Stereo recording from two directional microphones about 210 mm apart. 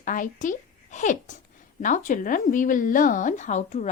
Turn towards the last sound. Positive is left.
turn(degrees=35)  # may be behind; listen again after turning